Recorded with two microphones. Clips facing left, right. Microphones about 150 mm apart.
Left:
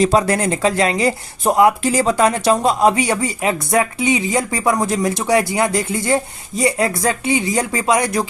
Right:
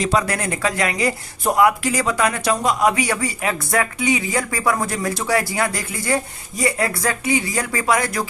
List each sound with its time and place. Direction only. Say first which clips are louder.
0.0 s speech: left 5 dB; 30° left (ahead or behind)